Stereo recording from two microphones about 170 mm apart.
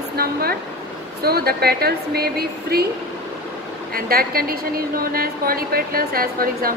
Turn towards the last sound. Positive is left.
turn(degrees=-60)  # may be behind; listen again after turning